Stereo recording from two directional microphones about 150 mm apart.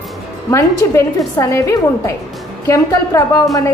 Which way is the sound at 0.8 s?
20° left (ahead or behind).